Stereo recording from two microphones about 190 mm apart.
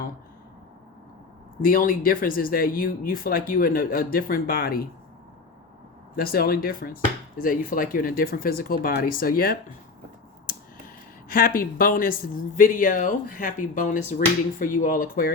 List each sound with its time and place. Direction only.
1.6 s speech: 45° left (ahead or behind)
6.1 s speech: 50° left (ahead or behind)
11.3 s speech: 50° left (ahead or behind)